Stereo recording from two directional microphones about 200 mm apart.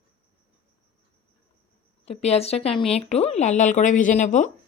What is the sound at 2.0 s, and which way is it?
Speech, 30° left (ahead or behind).